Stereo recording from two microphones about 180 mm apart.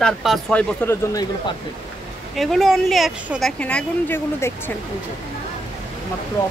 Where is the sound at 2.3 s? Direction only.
Centre (ahead or behind).